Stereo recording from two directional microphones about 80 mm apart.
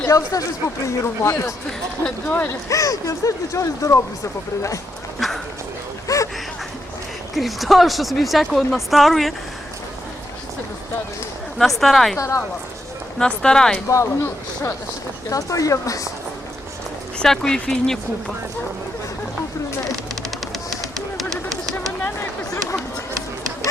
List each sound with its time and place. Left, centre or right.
0.1 s speech: left
2.0 s speech: centre
2.6 s speech: left
5.2 s a sound: centre
6.1 s a sound: left
7.3 s speech: centre
11.5 s speech: centre
12.1 s speech: left
13.1 s speech: centre
13.8 s speech: left
17.2 s speech: centre